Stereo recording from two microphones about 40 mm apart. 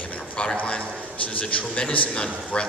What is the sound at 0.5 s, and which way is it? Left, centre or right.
A man's voice, left.